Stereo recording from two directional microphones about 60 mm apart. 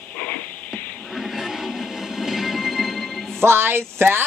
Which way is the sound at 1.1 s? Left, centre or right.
Centre.